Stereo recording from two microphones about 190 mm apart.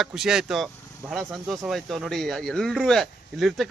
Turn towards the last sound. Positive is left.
turn(degrees=0)  # may be behind; listen again after turning